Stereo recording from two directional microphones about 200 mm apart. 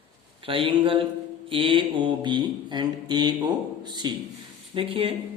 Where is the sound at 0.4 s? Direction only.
25° right (ahead or behind).